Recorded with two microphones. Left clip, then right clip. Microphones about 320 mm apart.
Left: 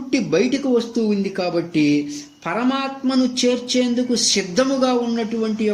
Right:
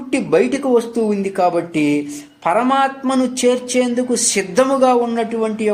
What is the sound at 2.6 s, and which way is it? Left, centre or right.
Speech, centre.